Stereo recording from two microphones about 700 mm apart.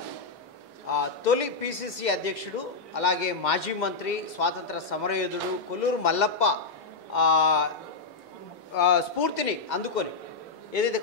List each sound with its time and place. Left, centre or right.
0.8 s a man's voice: left
8.7 s a man's voice: left